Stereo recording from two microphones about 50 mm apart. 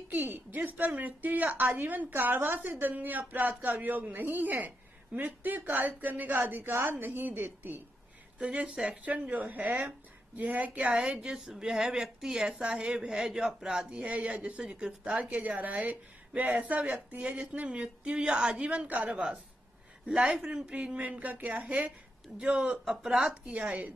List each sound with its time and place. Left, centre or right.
0.1 s a woman's voice: right
8.4 s a woman's voice: centre
9.0 s a woman's voice: right
10.9 s a woman's voice: centre
15.2 s a woman's voice: right
17.4 s a woman's voice: right
20.1 s a woman's voice: centre
21.2 s a woman's voice: right
22.4 s a woman's voice: centre
23.3 s a woman's voice: right